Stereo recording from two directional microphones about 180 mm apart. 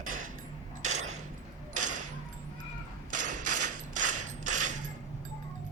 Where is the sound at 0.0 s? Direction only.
50° right (ahead or behind).